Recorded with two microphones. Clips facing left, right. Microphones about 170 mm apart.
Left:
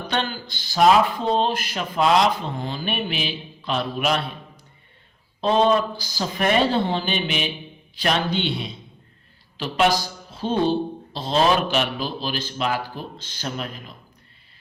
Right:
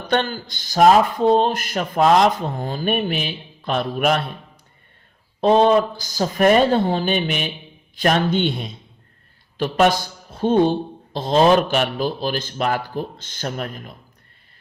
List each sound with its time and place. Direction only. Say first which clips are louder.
0.1 s speech: right 6 dB; 45° right (ahead or behind)
5.4 s speech: right 4 dB; 50° right (ahead or behind)